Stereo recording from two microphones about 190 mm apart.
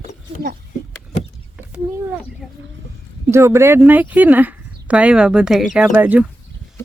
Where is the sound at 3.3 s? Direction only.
15° right (ahead or behind).